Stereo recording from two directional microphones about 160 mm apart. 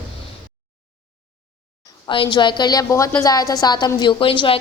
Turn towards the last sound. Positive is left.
turn(degrees=35)  # may be behind; listen again after turning